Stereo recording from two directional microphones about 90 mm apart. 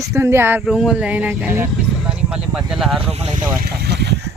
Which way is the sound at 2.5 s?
5° right (ahead or behind).